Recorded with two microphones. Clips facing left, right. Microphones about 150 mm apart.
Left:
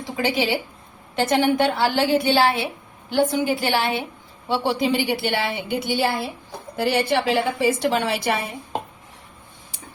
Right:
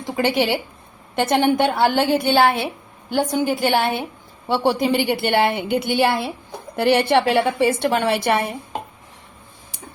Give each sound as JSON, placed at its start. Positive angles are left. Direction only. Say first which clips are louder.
{"t": 0.2, "sound": "a woman's voice", "louder": "right 3 dB", "side_deg": -60}
{"t": 1.1, "sound": "a woman's voice", "louder": "right 2 dB", "side_deg": -50}